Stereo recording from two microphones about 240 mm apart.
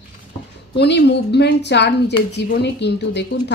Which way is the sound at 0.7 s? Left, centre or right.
Left.